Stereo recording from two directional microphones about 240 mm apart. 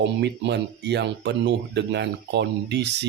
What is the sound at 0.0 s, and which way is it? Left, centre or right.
Speech, right.